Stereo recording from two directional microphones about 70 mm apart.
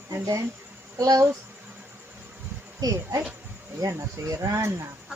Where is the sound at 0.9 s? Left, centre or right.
Right.